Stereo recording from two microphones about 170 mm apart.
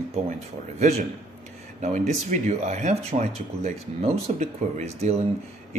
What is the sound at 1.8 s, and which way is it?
Speech, 40° right (ahead or behind).